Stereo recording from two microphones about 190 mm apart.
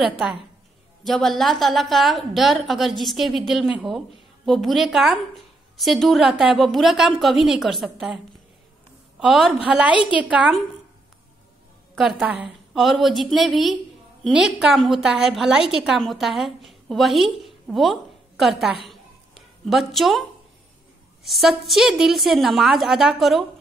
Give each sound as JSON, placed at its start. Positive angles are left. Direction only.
{"t": 1.0, "sound": "a woman's voice", "side_deg": 0}
{"t": 9.2, "sound": "a woman's voice", "side_deg": 0}
{"t": 11.9, "sound": "a woman's voice", "side_deg": 0}
{"t": 18.9, "sound": "a sound", "side_deg": 0}
{"t": 21.2, "sound": "a woman's voice", "side_deg": 0}